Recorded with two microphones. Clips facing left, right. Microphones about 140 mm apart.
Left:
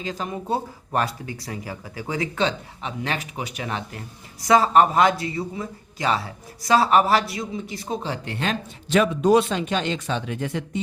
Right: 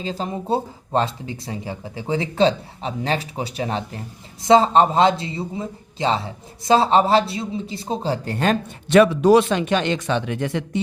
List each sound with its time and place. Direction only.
0.0 s speech: 30° right (ahead or behind)
8.9 s speech: 75° right (ahead or behind)